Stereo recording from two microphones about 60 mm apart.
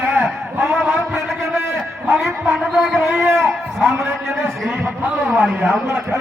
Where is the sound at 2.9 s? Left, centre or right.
Centre.